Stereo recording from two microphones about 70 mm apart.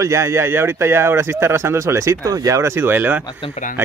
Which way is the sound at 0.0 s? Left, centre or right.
Right.